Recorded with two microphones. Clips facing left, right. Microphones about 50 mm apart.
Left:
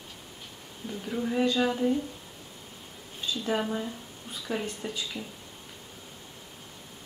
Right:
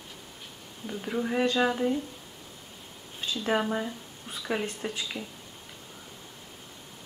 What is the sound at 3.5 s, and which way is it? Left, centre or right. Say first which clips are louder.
Speech: right 3 dB; right.